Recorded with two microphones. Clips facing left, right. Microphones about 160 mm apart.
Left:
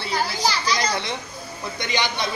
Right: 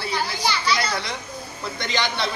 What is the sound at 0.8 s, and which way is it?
Speech, 25° left (ahead or behind).